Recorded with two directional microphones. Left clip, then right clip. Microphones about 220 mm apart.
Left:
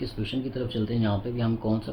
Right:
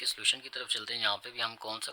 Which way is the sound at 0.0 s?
45° right (ahead or behind).